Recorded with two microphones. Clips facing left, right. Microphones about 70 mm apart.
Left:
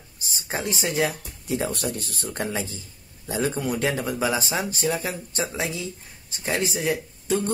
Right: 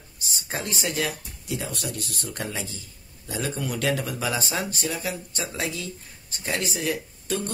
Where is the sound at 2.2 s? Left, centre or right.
Left.